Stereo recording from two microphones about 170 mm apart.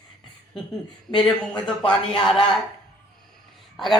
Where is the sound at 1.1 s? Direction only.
5° left (ahead or behind).